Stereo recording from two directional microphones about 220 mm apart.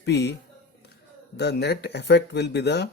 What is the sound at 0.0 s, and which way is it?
Speech, 50° left (ahead or behind).